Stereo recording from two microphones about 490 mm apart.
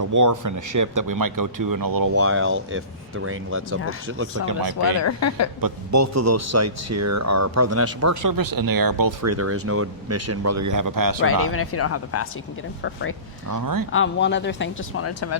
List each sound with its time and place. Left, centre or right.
0.0 s speech: right
2.1 s speech: right
4.9 s a woman's voice: left
5.5 s speech: right
11.4 s speech: left
13.5 s speech: right
13.9 s speech: left